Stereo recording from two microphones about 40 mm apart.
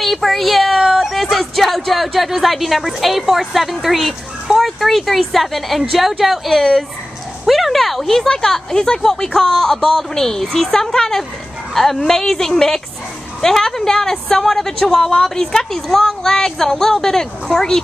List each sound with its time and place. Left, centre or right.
0.0 s a woman's voice: centre